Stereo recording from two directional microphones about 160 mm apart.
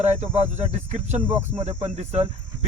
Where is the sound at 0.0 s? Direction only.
45° right (ahead or behind).